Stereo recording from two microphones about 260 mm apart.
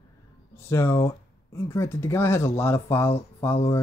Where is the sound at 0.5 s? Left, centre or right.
Centre.